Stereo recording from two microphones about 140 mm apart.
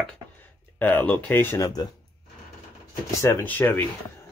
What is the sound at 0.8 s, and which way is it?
Speech, 10° left (ahead or behind).